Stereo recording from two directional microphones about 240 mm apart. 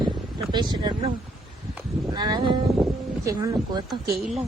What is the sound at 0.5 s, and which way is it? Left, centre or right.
Speech, centre.